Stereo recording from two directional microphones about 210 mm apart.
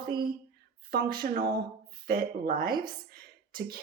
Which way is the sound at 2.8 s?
45° right (ahead or behind).